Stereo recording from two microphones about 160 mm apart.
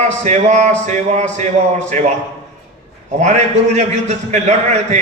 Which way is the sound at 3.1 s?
45° right (ahead or behind).